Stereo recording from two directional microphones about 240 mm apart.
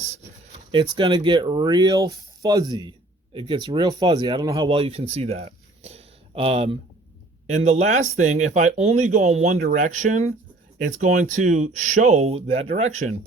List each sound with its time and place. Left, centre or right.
0.7 s speech: right